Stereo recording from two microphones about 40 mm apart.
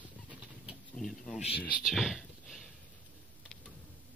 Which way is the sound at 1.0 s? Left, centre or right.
Centre.